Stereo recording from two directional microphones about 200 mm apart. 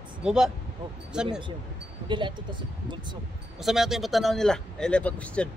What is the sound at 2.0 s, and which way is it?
Speech, 25° right (ahead or behind).